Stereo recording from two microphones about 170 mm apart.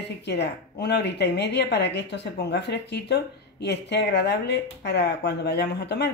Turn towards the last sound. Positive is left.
turn(degrees=80)